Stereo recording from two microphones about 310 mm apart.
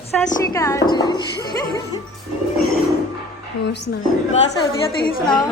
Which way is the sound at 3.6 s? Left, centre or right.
Left.